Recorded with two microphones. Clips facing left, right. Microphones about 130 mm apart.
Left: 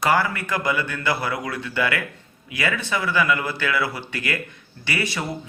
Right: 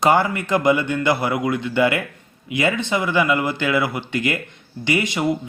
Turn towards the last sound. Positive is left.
turn(degrees=-20)  # may be behind; listen again after turning